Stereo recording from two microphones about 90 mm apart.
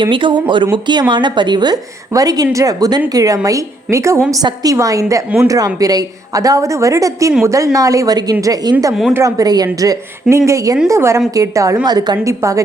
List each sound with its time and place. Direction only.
0.0 s a woman's voice: 65° right (ahead or behind); by 9.6 s 45° right (ahead or behind)
9.8 s a woman's voice: 35° right (ahead or behind)
12.3 s a woman's voice: 35° right (ahead or behind)